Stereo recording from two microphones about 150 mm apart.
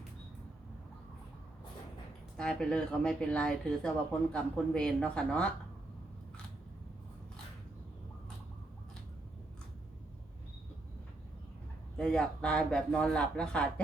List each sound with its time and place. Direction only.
2.4 s speech: 5° left (ahead or behind)
11.9 s speech: 5° left (ahead or behind)